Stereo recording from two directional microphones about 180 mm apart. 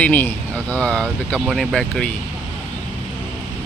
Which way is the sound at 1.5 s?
Centre (ahead or behind).